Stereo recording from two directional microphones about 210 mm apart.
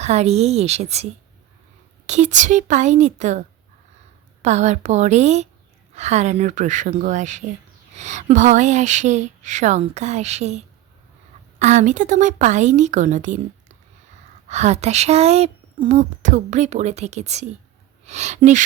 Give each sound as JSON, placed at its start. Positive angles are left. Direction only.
{"t": 0.0, "sound": "speech", "side_deg": -30}
{"t": 2.0, "sound": "speech", "side_deg": -35}
{"t": 4.4, "sound": "speech", "side_deg": -35}
{"t": 11.6, "sound": "speech", "side_deg": -35}
{"t": 14.4, "sound": "speech", "side_deg": -30}